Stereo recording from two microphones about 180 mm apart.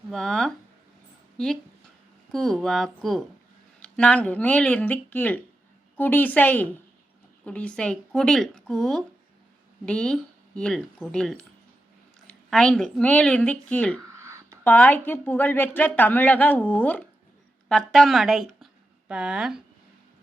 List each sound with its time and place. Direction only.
0.1 s a woman's voice: 5° left (ahead or behind)
14.2 s a sound: 15° right (ahead or behind)
14.6 s a woman's voice: 10° left (ahead or behind)